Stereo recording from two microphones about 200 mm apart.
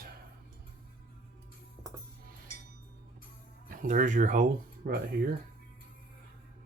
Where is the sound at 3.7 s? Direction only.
40° right (ahead or behind).